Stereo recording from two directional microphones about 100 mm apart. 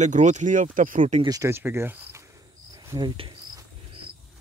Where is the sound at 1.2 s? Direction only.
35° right (ahead or behind).